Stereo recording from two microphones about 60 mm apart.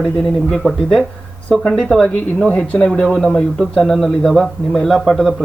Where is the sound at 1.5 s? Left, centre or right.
Centre.